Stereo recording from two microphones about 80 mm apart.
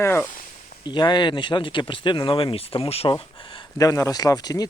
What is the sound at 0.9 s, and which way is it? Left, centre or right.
Speech, left.